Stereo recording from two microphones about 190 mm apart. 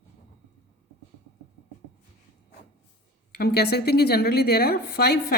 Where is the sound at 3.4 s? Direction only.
60° left (ahead or behind).